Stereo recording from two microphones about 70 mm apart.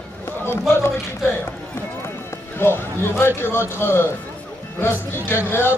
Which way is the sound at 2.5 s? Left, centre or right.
Left.